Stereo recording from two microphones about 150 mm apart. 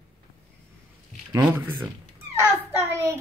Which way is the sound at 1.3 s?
15° right (ahead or behind).